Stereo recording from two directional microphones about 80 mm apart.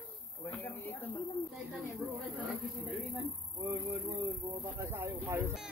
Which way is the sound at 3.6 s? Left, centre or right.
Right.